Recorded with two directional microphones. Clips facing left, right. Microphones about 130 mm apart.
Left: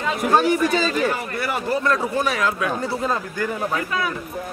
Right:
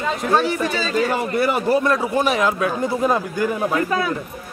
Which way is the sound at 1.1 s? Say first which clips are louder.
Right 6 dB; 20° right (ahead or behind).